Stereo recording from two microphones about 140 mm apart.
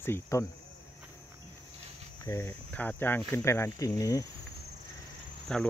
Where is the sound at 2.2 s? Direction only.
15° left (ahead or behind).